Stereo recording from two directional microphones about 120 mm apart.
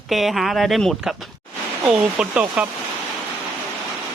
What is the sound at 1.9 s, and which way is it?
Speech, 10° right (ahead or behind).